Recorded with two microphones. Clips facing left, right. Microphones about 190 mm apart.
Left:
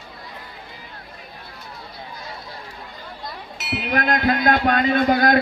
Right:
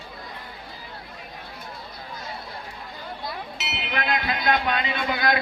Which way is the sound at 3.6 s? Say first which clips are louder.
Left 9 dB; 50° left (ahead or behind).